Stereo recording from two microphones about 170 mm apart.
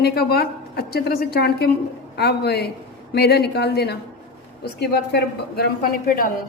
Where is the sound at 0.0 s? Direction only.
65° left (ahead or behind).